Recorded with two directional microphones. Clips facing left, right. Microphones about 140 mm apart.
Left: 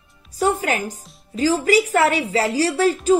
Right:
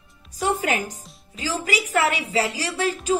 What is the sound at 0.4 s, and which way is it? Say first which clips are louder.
A woman's voice: left 3 dB; 40° left (ahead or behind).